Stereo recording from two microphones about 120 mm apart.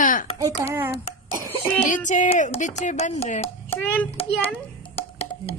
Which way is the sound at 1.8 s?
90° left.